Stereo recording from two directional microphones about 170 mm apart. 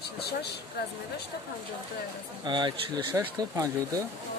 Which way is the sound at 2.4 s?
25° right (ahead or behind).